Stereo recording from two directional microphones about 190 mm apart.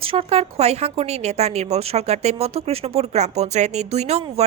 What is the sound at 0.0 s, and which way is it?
Speech, 30° right (ahead or behind).